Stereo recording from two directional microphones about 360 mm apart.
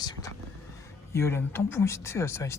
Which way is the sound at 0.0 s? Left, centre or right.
Centre.